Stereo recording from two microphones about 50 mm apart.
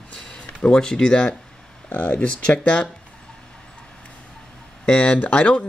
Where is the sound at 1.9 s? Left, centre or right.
Left.